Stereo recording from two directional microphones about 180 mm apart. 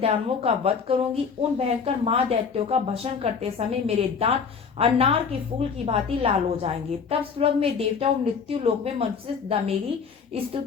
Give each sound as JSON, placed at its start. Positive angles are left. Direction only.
{"t": 0.0, "sound": "a woman's voice", "side_deg": -30}